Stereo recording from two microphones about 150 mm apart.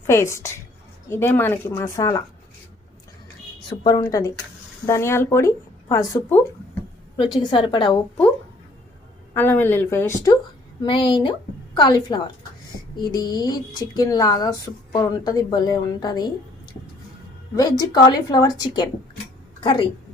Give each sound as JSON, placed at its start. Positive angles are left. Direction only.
{"t": 0.1, "sound": "speech", "side_deg": 20}
{"t": 3.7, "sound": "speech", "side_deg": 25}
{"t": 7.5, "sound": "a woman's voice", "side_deg": 35}
{"t": 9.3, "sound": "speech", "side_deg": 15}
{"t": 10.8, "sound": "a woman's voice", "side_deg": 35}
{"t": 17.5, "sound": "a woman's voice", "side_deg": 25}